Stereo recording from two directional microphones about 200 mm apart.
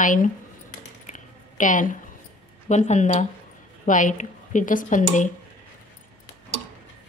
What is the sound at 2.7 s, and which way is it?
Speech, 35° left (ahead or behind).